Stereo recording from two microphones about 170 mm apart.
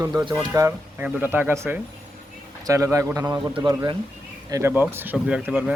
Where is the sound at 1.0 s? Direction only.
5° right (ahead or behind).